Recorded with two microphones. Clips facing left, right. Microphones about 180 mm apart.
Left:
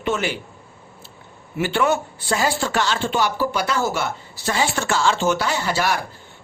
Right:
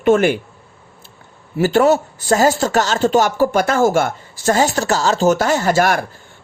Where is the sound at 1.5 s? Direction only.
40° right (ahead or behind).